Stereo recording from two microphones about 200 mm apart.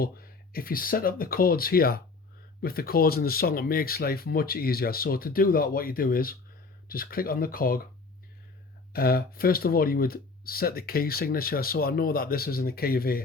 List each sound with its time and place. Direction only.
0.0 s speech: 50° left (ahead or behind)
8.9 s speech: 50° left (ahead or behind)